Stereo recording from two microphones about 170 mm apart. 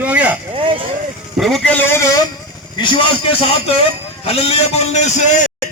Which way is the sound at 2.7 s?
30° left (ahead or behind).